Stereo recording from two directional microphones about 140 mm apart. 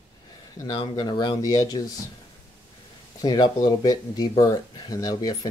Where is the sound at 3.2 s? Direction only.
25° left (ahead or behind).